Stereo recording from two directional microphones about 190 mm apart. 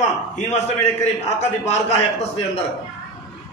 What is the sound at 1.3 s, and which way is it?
Speech, 35° left (ahead or behind).